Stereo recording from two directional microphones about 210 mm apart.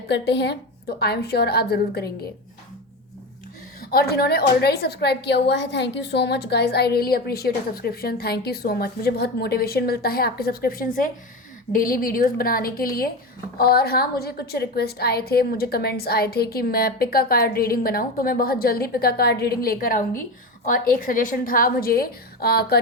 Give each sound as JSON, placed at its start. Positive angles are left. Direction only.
{"t": 0.1, "sound": "a woman's voice", "side_deg": 55}
{"t": 3.8, "sound": "a woman's voice", "side_deg": 45}